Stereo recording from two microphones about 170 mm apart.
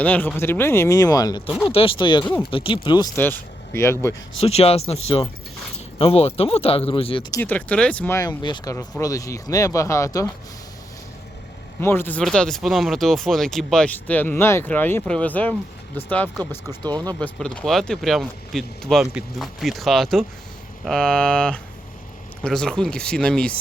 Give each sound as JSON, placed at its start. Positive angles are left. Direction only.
{"t": 0.0, "sound": "speech", "side_deg": 10}
{"t": 3.2, "sound": "speech", "side_deg": 10}
{"t": 4.4, "sound": "speech", "side_deg": 35}
{"t": 7.4, "sound": "speech", "side_deg": 10}
{"t": 11.8, "sound": "speech", "side_deg": 15}
{"t": 16.6, "sound": "speech", "side_deg": -25}
{"t": 17.4, "sound": "speech", "side_deg": 5}